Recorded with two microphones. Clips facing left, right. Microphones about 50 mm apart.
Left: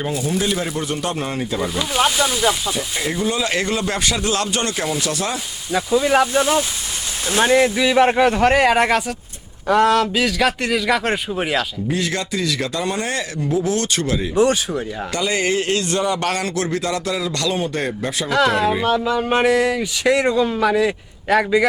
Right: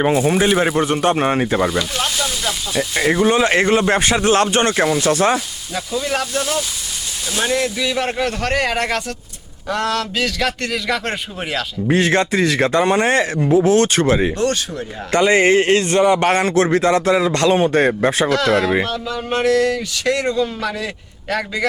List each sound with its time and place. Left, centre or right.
0.0 s speech: right
1.8 s speech: centre
2.9 s speech: right
5.7 s speech: centre
11.9 s speech: right
14.3 s speech: centre
15.1 s speech: right
18.3 s speech: centre